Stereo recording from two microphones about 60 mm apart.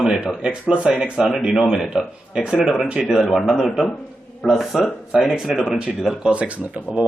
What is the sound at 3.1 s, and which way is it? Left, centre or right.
A man's voice, centre.